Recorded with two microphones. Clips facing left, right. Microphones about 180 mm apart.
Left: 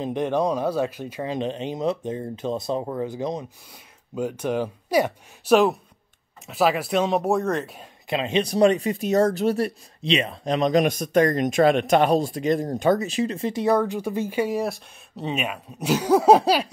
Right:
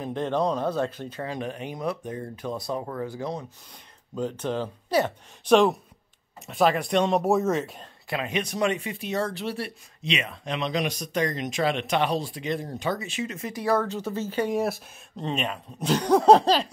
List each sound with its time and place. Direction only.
0.0 s speech: 15° left (ahead or behind); by 7.8 s centre (ahead or behind)
8.1 s speech: 25° left (ahead or behind); by 9.7 s 45° left (ahead or behind)
10.0 s speech: 30° left (ahead or behind); by 16.7 s 10° left (ahead or behind)